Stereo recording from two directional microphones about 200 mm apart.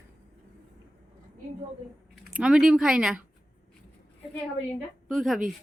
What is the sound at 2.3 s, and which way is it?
Speech, 5° right (ahead or behind).